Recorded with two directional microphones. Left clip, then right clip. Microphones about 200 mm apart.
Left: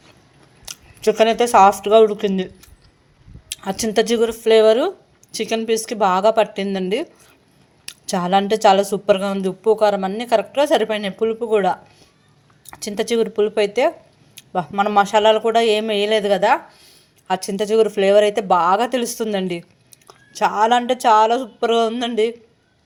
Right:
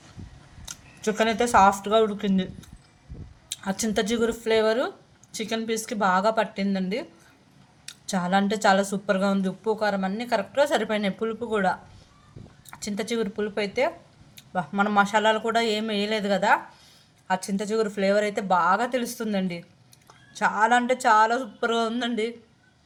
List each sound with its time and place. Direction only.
0.6 s a woman's voice: 35° left (ahead or behind)